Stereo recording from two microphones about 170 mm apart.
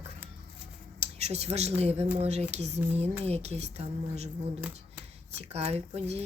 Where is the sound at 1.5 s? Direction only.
40° right (ahead or behind).